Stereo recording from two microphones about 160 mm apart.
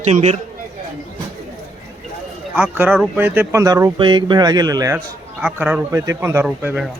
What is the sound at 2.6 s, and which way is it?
A man's voice, 10° right (ahead or behind).